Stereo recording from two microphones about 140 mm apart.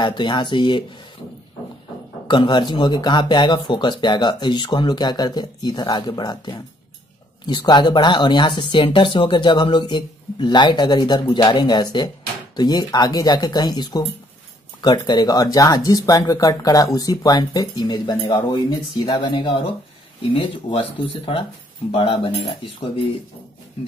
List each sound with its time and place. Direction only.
0.0 s speech: 35° left (ahead or behind)
2.2 s speech: 35° left (ahead or behind)
21.9 s speech: 40° left (ahead or behind)